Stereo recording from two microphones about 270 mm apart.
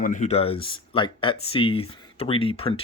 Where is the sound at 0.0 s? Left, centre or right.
Left.